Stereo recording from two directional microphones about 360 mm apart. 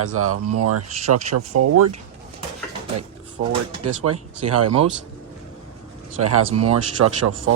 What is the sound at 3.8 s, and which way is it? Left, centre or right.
Speech, right.